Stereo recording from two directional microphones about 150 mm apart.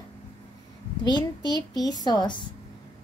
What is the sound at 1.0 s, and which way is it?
A woman's voice, 30° left (ahead or behind).